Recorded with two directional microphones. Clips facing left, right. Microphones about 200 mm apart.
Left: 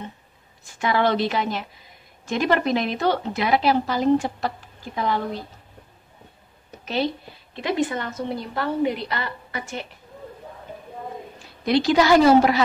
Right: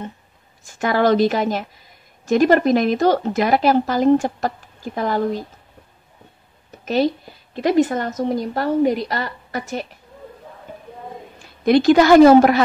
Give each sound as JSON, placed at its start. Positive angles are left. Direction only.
{"t": 0.7, "sound": "speech", "side_deg": -45}
{"t": 6.8, "sound": "a sound", "side_deg": -45}
{"t": 7.5, "sound": "a woman's voice", "side_deg": -45}
{"t": 11.6, "sound": "speech", "side_deg": -50}